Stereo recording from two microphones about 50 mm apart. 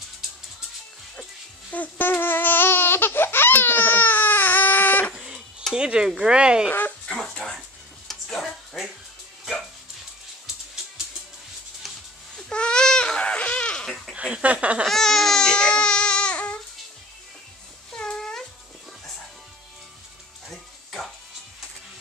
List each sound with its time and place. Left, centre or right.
1.7 s speech: left
2.0 s babbling: left
5.1 s a sound: centre
5.7 s speech: centre
8.1 s a sound: centre
9.4 s music: centre
12.4 s babbling: centre
14.4 s a sound: right
14.9 s baby cry: centre; by 16.5 s left
17.9 s cat: centre
20.4 s music: centre